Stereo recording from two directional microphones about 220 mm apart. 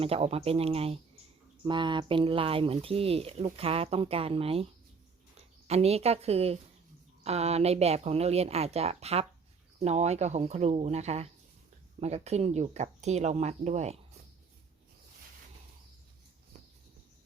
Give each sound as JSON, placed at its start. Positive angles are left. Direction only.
{"t": 0.0, "sound": "speech", "side_deg": -25}
{"t": 5.6, "sound": "speech", "side_deg": -30}